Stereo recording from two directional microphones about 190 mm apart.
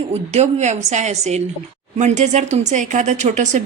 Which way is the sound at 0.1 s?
35° right (ahead or behind).